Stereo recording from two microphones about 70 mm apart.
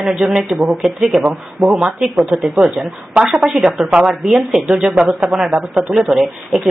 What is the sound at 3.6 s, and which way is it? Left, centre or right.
Speech, centre.